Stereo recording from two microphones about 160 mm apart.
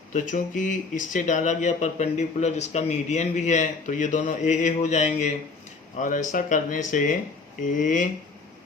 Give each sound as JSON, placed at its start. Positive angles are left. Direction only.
{"t": 0.1, "sound": "speech", "side_deg": 50}